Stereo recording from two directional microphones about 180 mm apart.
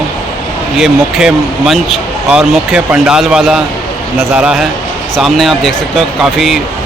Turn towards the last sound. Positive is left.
turn(degrees=0)  # may be behind; listen again after turning